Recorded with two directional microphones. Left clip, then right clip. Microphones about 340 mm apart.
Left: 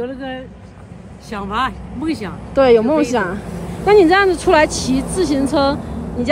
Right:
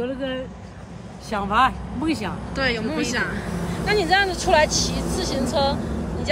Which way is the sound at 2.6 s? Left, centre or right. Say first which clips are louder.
Left 13 dB; centre.